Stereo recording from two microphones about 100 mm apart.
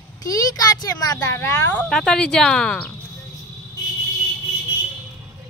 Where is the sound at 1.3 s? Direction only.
25° left (ahead or behind).